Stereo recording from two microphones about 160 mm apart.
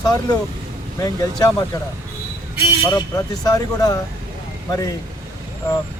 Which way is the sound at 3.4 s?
20° left (ahead or behind).